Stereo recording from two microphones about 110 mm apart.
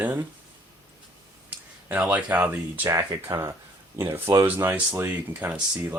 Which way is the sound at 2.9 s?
25° right (ahead or behind).